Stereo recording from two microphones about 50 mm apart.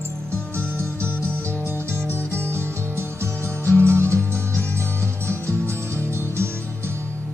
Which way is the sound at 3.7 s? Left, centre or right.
Right.